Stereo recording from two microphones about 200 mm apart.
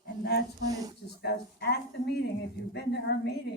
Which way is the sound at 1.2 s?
55° left (ahead or behind).